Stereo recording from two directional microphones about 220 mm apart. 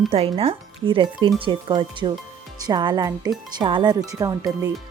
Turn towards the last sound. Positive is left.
turn(degrees=-15)  # may be behind; listen again after turning